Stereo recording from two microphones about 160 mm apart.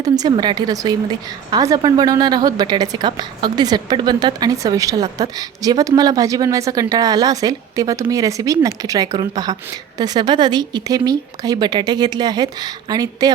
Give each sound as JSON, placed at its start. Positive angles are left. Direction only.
{"t": 0.0, "sound": "a woman's voice", "side_deg": -25}